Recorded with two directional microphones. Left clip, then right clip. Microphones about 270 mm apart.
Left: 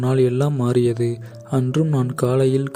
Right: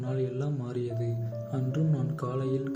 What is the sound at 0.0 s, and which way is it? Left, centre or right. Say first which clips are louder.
Speech: left 14 dB; left.